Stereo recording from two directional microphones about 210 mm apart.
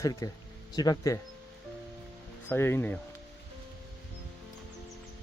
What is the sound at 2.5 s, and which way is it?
Speech, 10° left (ahead or behind).